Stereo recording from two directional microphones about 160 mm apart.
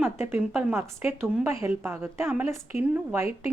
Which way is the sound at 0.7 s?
15° right (ahead or behind).